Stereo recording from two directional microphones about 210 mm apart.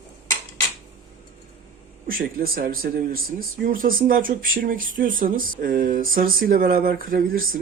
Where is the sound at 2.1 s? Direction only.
45° right (ahead or behind).